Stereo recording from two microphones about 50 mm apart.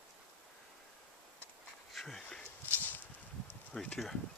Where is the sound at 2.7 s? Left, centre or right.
Left.